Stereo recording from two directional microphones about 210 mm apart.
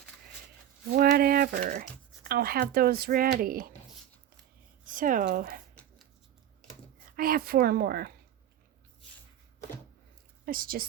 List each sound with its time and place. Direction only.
0.9 s speech: 45° right (ahead or behind)
4.9 s speech: 40° right (ahead or behind)
7.2 s speech: 45° right (ahead or behind)
10.4 s speech: 45° right (ahead or behind)